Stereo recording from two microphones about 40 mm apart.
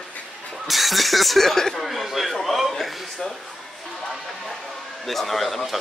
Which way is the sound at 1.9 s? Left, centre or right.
Centre.